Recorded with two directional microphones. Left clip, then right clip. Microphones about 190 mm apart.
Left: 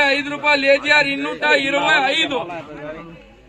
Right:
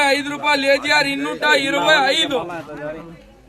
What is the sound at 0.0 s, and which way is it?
A man's voice, 20° right (ahead or behind).